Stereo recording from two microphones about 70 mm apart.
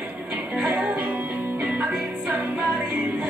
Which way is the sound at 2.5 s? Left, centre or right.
Centre.